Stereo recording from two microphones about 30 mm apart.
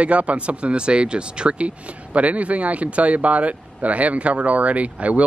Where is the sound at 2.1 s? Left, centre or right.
Right.